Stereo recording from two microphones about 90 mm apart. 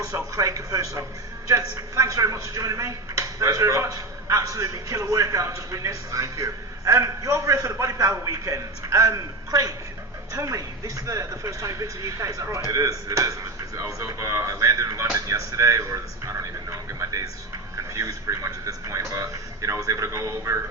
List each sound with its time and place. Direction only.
0.0 s speech: 35° right (ahead or behind)